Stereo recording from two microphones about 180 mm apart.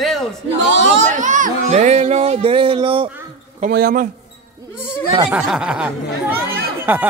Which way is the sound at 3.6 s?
55° right (ahead or behind).